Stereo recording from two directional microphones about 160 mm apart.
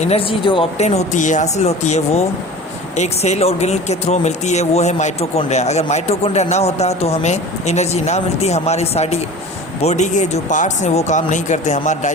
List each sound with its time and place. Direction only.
0.0 s speech: 40° left (ahead or behind)